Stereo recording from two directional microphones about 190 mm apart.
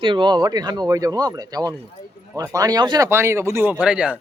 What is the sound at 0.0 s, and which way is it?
Speech, 25° right (ahead or behind).